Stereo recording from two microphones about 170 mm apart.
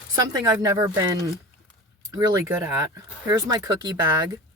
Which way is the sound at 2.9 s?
25° right (ahead or behind).